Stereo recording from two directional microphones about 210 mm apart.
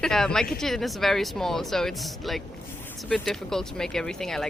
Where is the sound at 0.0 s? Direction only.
Centre (ahead or behind).